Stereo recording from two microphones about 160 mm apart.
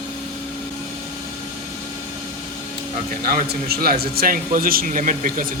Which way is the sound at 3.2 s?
70° right (ahead or behind).